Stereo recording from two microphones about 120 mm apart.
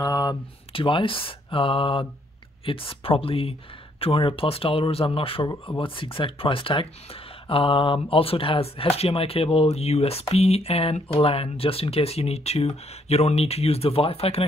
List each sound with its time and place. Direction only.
0.0 s speech: 30° left (ahead or behind)
0.7 s speech: 45° left (ahead or behind)